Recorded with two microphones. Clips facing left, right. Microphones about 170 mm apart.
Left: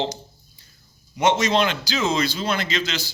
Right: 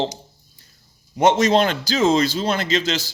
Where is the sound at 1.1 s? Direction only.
45° right (ahead or behind).